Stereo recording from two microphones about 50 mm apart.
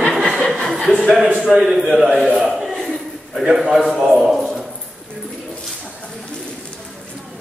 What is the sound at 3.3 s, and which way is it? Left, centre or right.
A man's voice, centre.